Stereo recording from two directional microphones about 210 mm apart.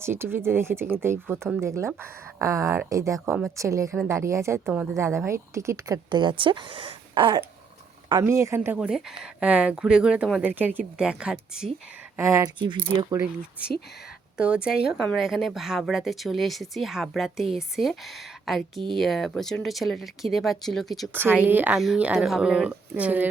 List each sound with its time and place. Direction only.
0.0 s a woman's voice: 10° right (ahead or behind)
14.3 s a woman's voice: 5° right (ahead or behind)